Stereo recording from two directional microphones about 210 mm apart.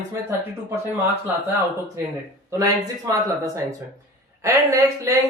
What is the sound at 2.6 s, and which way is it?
A man's voice, 15° right (ahead or behind).